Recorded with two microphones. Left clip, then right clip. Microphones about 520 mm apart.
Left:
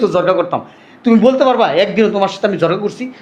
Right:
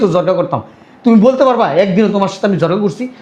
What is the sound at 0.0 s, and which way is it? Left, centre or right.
Speech, right.